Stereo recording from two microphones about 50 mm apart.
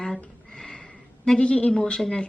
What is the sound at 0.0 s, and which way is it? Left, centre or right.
A woman's voice, centre.